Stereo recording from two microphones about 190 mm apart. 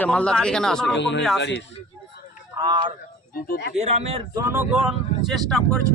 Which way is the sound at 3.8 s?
35° right (ahead or behind).